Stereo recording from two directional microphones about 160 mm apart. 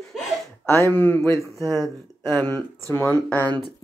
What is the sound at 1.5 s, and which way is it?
Speech, 20° right (ahead or behind).